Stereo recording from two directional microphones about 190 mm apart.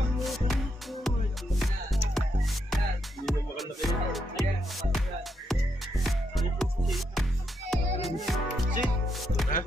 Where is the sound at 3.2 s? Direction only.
Centre (ahead or behind).